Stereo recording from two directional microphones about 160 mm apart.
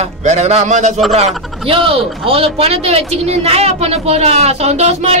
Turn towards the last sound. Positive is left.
turn(degrees=-45)  # may be behind; listen again after turning